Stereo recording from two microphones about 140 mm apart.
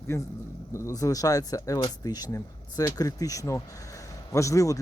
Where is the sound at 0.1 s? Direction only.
20° left (ahead or behind).